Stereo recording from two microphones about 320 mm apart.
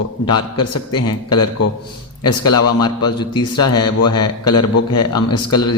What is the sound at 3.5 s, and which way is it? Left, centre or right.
Speech, left.